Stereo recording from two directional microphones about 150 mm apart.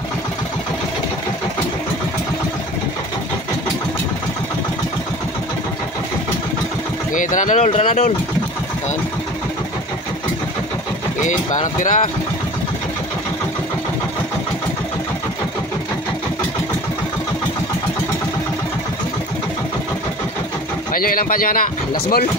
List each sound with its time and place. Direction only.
7.2 s speech: 60° left (ahead or behind)
11.2 s speech: 55° left (ahead or behind)
20.9 s speech: 70° left (ahead or behind); by 22.2 s 90° left